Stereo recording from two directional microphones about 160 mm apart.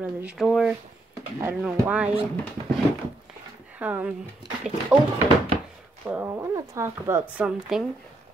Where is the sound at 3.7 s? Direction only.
10° right (ahead or behind).